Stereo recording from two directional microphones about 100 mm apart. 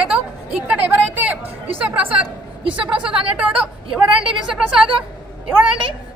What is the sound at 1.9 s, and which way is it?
Speech, 15° right (ahead or behind).